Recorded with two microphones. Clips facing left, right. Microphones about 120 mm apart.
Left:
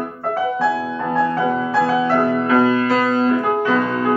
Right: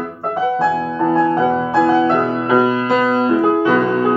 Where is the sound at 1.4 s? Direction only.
25° right (ahead or behind).